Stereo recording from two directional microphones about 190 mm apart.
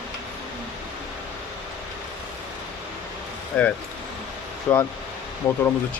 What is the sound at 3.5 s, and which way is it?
Speech, 5° left (ahead or behind).